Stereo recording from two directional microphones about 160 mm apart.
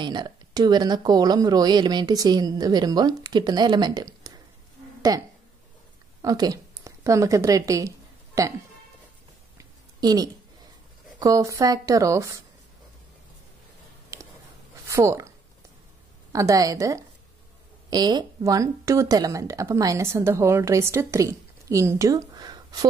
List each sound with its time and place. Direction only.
0.0 s a woman's voice: 25° right (ahead or behind)
9.6 s a sound: 25° right (ahead or behind)
11.1 s speech: 20° right (ahead or behind)
14.1 s a sound: 20° right (ahead or behind)
14.9 s speech: 20° right (ahead or behind)
16.3 s speech: 20° right (ahead or behind)